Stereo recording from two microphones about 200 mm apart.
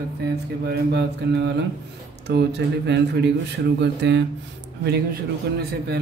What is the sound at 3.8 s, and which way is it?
Mantra, 60° right (ahead or behind).